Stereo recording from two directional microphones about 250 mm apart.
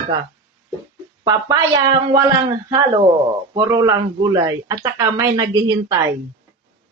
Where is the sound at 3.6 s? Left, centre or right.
Centre.